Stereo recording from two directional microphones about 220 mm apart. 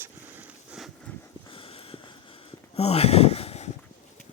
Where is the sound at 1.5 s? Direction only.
25° left (ahead or behind).